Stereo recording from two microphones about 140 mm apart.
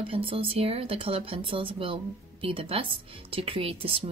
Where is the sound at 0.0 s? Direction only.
40° right (ahead or behind).